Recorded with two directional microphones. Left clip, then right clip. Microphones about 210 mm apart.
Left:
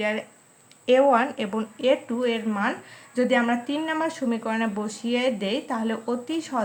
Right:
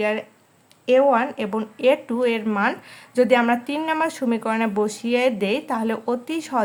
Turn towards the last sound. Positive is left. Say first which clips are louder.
# right 4 dB
turn(degrees=-35)  # may be behind; listen again after turning